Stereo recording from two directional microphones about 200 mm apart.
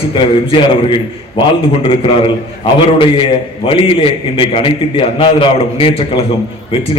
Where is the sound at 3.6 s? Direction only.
25° left (ahead or behind).